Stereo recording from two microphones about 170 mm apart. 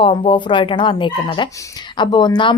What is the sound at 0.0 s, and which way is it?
A woman's voice, 30° left (ahead or behind).